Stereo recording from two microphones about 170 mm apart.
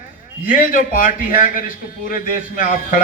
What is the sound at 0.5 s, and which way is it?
A man's voice, 50° left (ahead or behind).